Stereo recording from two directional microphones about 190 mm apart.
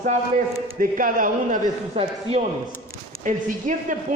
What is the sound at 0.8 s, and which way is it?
Speech, 45° right (ahead or behind).